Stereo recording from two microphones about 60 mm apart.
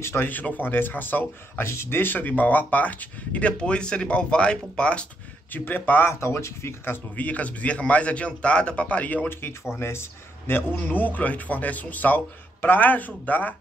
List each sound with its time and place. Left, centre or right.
0.0 s speech: left
1.6 s speech: left; by 5.0 s centre
5.5 s speech: left
6.1 s speech: left
7.2 s speech: left
9.3 s speech: left